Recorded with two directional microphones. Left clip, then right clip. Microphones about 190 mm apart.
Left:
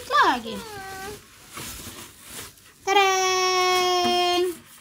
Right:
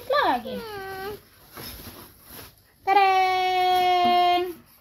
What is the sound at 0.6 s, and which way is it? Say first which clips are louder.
Speech: right 2 dB; 40° right (ahead or behind).